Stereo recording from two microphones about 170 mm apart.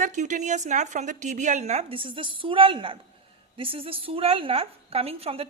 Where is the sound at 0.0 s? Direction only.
45° right (ahead or behind).